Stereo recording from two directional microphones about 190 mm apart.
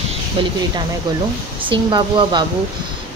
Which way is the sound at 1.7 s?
25° right (ahead or behind).